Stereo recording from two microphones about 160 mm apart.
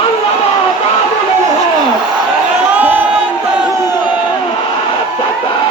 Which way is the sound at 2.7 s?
10° right (ahead or behind).